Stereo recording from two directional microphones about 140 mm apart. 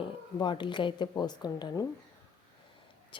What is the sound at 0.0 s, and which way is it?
Speech, 35° left (ahead or behind).